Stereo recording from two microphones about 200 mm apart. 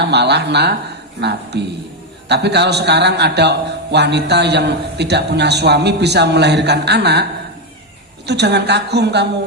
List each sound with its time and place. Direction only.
0.0 s a man's voice: 55° right (ahead or behind)
8.3 s a man's voice: 55° right (ahead or behind)